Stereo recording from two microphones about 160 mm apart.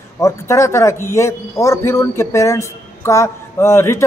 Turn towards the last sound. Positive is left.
turn(degrees=15)  # may be behind; listen again after turning